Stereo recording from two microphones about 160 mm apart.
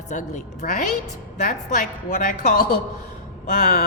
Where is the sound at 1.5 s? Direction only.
55° left (ahead or behind).